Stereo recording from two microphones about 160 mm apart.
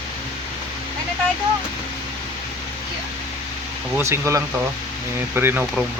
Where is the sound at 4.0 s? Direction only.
15° right (ahead or behind).